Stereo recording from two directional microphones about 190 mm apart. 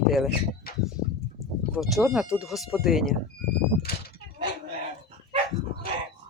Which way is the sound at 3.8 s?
55° left (ahead or behind).